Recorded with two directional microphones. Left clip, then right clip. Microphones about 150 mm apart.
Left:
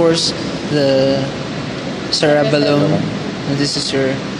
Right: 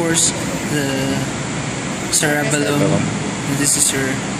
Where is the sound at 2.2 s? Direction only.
30° left (ahead or behind).